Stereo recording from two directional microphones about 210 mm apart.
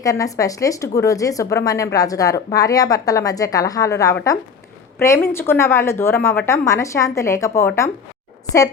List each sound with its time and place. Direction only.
0.0 s speech: 15° left (ahead or behind)